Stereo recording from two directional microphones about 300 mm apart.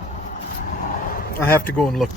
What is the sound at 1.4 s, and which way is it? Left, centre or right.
Speech, centre.